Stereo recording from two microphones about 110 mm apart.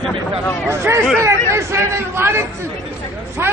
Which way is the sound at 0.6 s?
20° right (ahead or behind).